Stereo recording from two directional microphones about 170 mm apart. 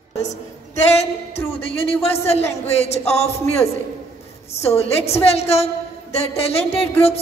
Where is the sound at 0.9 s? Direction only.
35° left (ahead or behind).